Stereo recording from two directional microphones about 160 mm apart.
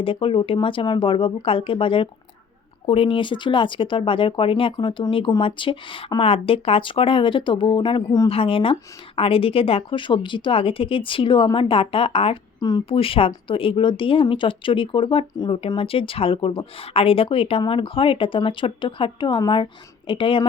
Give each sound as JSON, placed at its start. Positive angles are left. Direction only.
{"t": 0.0, "sound": "speech", "side_deg": 35}